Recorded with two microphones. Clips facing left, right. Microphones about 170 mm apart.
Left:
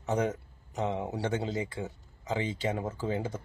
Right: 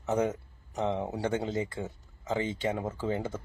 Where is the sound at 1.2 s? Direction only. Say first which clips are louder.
Right 1 dB; 20° left (ahead or behind).